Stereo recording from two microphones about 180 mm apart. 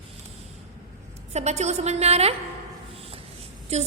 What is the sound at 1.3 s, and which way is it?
A woman's voice, 40° right (ahead or behind).